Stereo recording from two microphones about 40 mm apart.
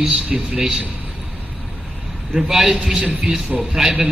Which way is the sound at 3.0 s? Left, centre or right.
Right.